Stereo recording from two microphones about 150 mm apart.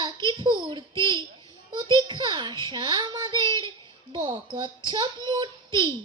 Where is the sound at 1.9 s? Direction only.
30° right (ahead or behind).